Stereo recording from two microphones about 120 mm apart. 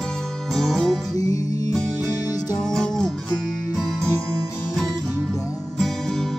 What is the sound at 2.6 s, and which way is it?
Music, 5° left (ahead or behind).